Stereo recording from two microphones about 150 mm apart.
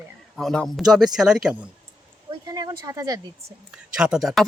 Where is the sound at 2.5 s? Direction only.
25° right (ahead or behind).